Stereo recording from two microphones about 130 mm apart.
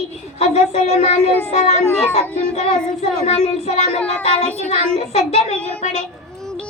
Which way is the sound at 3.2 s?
55° left (ahead or behind).